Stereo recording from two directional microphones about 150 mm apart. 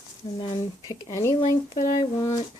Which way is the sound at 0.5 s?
25° left (ahead or behind).